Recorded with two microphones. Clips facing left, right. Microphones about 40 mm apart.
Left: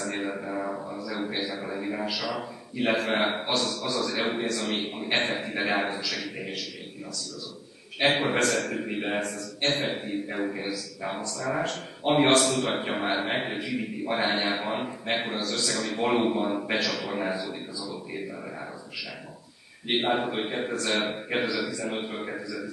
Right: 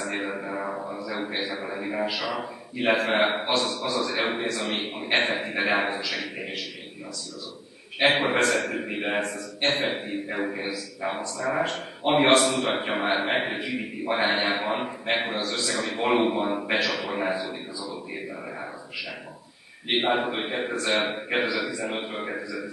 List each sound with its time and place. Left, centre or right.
0.0 s a man's voice: centre
8.0 s a man's voice: centre
19.9 s a man's voice: centre